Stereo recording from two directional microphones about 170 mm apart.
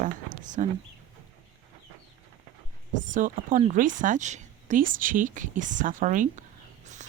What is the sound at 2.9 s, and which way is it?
Speech, 50° right (ahead or behind).